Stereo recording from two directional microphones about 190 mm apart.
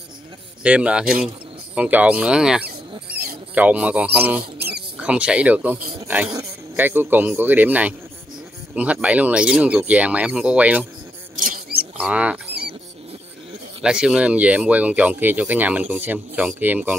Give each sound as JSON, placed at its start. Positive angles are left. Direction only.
{"t": 0.7, "sound": "speech", "side_deg": -5}
{"t": 4.6, "sound": "rodents", "side_deg": -55}
{"t": 5.0, "sound": "speech", "side_deg": -5}
{"t": 11.3, "sound": "rodents", "side_deg": -45}
{"t": 11.8, "sound": "mouse", "side_deg": -5}
{"t": 13.8, "sound": "speech", "side_deg": -5}